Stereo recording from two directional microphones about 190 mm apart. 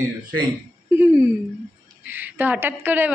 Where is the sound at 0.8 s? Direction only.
5° right (ahead or behind).